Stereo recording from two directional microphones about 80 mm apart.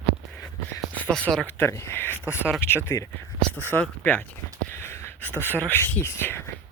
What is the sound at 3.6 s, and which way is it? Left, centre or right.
Speech, left.